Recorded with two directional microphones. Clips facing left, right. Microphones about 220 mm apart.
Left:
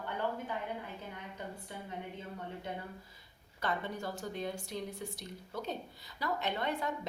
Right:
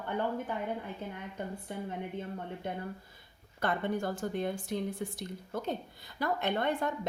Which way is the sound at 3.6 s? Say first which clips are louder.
Right 5 dB; 50° right (ahead or behind).